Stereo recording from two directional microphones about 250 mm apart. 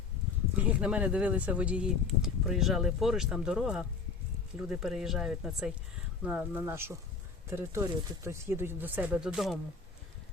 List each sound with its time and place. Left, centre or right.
0.5 s speech: centre